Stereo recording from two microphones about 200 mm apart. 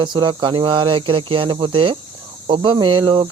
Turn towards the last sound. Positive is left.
turn(degrees=-20)  # may be behind; listen again after turning